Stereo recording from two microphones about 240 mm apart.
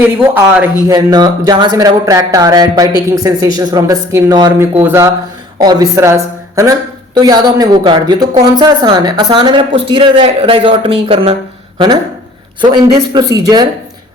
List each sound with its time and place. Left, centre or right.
0.0 s speech: centre
12.6 s speech: centre